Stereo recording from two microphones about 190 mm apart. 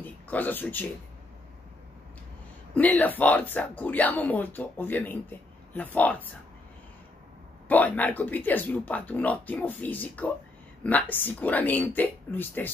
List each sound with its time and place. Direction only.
0.0 s speech: 10° left (ahead or behind)
2.7 s speech: 10° left (ahead or behind)
7.6 s speech: 10° left (ahead or behind)